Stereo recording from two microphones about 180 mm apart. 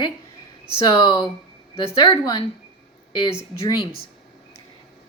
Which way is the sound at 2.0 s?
20° left (ahead or behind).